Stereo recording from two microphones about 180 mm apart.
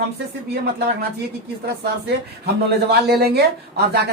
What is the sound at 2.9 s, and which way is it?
Speech, 65° right (ahead or behind).